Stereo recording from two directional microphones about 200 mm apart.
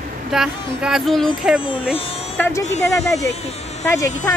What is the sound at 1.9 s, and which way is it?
Speech, 30° left (ahead or behind).